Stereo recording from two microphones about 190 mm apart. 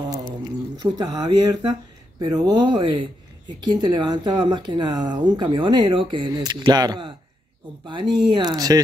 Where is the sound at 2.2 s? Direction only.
20° right (ahead or behind).